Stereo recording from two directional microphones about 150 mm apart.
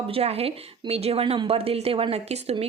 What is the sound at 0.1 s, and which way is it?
A woman's voice, 40° right (ahead or behind).